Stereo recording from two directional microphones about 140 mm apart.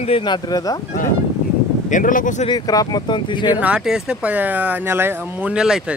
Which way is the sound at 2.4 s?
30° left (ahead or behind).